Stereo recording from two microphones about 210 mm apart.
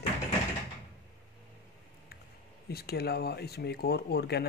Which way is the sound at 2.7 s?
50° left (ahead or behind).